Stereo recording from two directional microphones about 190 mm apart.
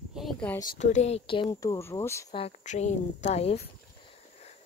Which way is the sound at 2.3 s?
35° left (ahead or behind).